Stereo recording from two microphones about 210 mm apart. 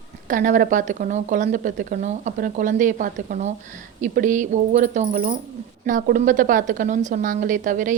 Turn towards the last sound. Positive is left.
turn(degrees=-40)  # may be behind; listen again after turning